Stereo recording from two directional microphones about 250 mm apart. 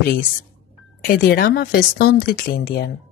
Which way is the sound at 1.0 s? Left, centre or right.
Left.